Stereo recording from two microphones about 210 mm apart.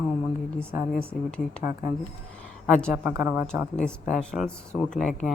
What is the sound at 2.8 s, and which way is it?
A woman's voice, centre (ahead or behind).